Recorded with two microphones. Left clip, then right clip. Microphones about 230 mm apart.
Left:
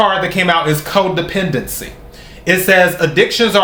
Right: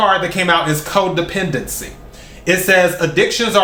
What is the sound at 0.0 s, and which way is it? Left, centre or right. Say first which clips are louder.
Speech: left 1 dB; centre.